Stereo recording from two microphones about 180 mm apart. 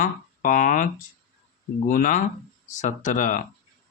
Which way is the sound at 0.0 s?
50° left (ahead or behind).